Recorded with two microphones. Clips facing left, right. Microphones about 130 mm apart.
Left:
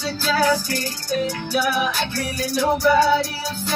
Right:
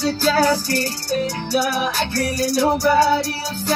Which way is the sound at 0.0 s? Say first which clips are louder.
Right 3 dB; 40° right (ahead or behind).